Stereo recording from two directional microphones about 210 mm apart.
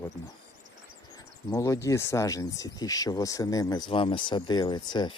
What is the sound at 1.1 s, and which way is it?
Speech, 15° left (ahead or behind).